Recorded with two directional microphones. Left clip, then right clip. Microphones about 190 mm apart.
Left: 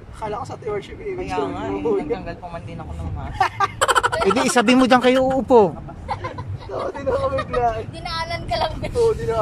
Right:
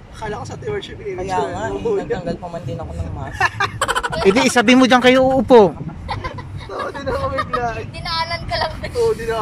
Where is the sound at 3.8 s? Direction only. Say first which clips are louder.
Left 2 dB; centre (ahead or behind).